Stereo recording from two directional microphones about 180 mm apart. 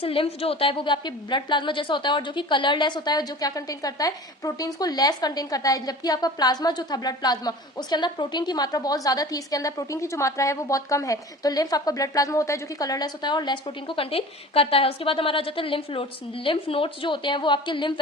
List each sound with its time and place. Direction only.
0.0 s a woman's voice: 30° left (ahead or behind)